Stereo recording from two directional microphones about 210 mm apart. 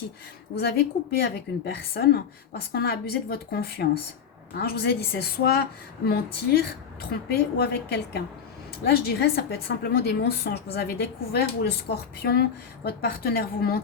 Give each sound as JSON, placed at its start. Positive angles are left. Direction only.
{"t": 0.5, "sound": "a woman's voice", "side_deg": 50}